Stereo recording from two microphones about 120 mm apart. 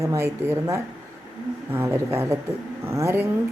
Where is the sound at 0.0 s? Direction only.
25° right (ahead or behind).